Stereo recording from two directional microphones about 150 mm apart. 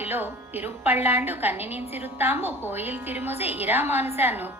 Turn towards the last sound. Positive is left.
turn(degrees=-15)  # may be behind; listen again after turning